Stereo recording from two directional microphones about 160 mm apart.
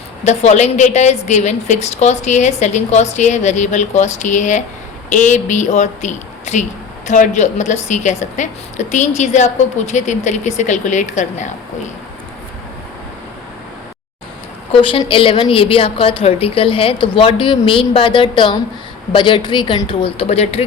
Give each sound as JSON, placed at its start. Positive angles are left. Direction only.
{"t": 0.3, "sound": "a woman's voice", "side_deg": 45}
{"t": 14.8, "sound": "a woman's voice", "side_deg": 35}